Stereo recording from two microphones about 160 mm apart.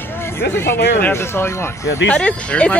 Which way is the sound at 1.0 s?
15° left (ahead or behind).